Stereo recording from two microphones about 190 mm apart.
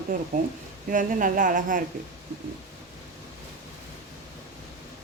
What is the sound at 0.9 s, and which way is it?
Speech, 45° right (ahead or behind).